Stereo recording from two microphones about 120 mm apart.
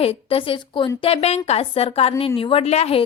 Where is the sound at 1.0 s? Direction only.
55° left (ahead or behind).